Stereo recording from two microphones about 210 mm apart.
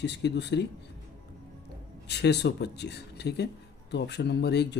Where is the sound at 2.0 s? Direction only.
55° left (ahead or behind).